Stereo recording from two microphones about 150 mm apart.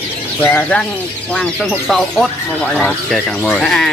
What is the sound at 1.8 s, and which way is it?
Speech, centre (ahead or behind).